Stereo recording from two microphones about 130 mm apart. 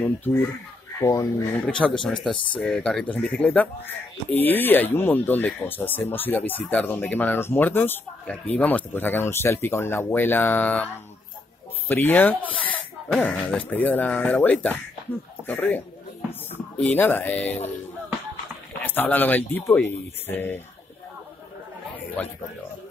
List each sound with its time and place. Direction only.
0.0 s speech: 15° left (ahead or behind)
1.8 s speech: 5° left (ahead or behind)
11.9 s speech: 15° left (ahead or behind)
13.1 s speech: 5° left (ahead or behind)
16.8 s speech: 15° left (ahead or behind)
18.7 s speech: 15° left (ahead or behind)
22.2 s speech: 10° left (ahead or behind)